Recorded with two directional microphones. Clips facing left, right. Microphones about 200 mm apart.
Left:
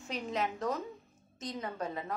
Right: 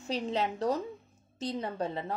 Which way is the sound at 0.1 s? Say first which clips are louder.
Right 4 dB; 30° right (ahead or behind).